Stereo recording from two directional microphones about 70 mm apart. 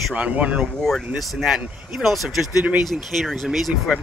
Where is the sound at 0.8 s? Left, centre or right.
Centre.